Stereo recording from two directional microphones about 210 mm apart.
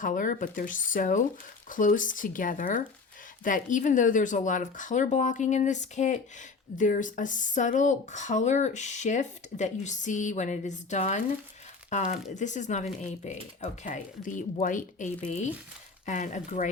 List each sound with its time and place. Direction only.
0.0 s speech: 40° left (ahead or behind)